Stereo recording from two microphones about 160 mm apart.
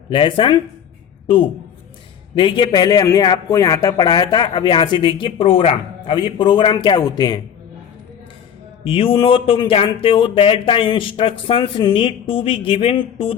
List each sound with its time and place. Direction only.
0.1 s speech: 30° left (ahead or behind)
2.3 s speech: 30° left (ahead or behind)
8.8 s speech: 35° left (ahead or behind)